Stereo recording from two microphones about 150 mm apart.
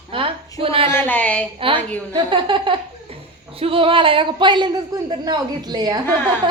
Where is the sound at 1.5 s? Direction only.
35° right (ahead or behind).